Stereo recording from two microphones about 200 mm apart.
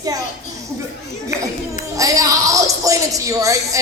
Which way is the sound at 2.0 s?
15° right (ahead or behind).